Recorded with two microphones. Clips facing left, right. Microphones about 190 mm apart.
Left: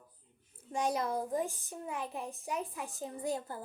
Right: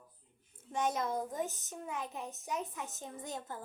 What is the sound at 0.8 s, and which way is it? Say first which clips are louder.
Speech: left 1 dB; 35° left (ahead or behind).